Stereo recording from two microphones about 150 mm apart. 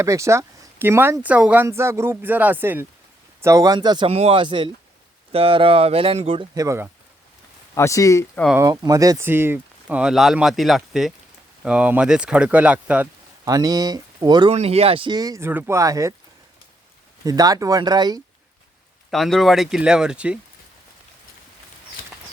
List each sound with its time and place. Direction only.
0.0 s speech: 20° right (ahead or behind)
7.8 s speech: 20° left (ahead or behind)
8.5 s speech: 25° right (ahead or behind); by 13.1 s 10° right (ahead or behind)
13.4 s speech: 25° right (ahead or behind)
14.5 s speech: 45° right (ahead or behind); by 16.1 s 20° right (ahead or behind)
17.2 s speech: 25° right (ahead or behind)
19.1 s speech: centre (ahead or behind)